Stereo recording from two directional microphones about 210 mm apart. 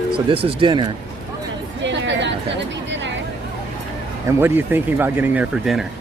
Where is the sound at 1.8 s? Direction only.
55° right (ahead or behind).